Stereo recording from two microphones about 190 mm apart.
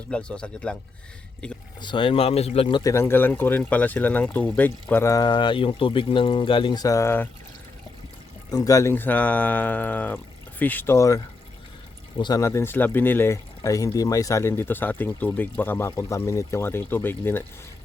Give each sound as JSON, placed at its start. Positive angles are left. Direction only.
{"t": 0.1, "sound": "speech", "side_deg": 5}
{"t": 1.8, "sound": "speech", "side_deg": 25}
{"t": 2.9, "sound": "speech", "side_deg": 10}
{"t": 8.4, "sound": "speech", "side_deg": 20}